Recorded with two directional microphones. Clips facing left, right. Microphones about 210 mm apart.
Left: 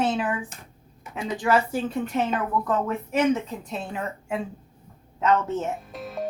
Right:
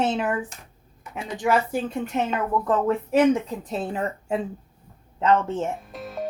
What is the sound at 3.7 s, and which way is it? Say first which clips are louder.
Speech: right 4 dB; 35° right (ahead or behind).